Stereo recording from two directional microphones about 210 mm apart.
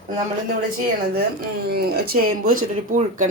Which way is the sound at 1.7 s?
45° right (ahead or behind).